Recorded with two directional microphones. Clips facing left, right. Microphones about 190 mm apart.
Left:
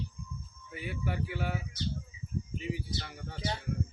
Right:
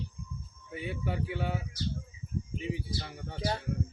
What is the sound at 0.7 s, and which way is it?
Speech, 25° right (ahead or behind).